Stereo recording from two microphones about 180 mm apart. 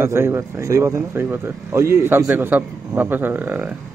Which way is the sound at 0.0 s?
15° right (ahead or behind).